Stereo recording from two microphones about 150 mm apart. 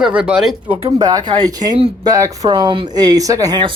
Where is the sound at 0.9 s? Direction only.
25° right (ahead or behind).